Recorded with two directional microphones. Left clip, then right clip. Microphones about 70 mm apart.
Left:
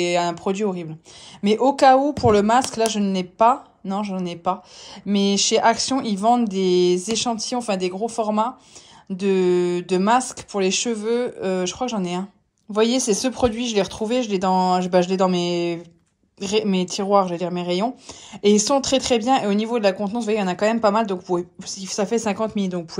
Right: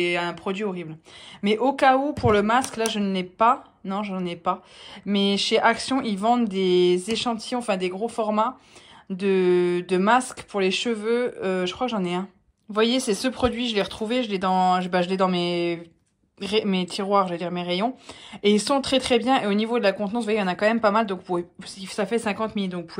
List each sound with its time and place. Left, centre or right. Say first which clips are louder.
0.0 s speech: left 4 dB; left
12.7 s speech: left 3 dB; left